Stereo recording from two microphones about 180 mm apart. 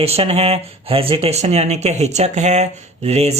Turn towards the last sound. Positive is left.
turn(degrees=-35)  # may be behind; listen again after turning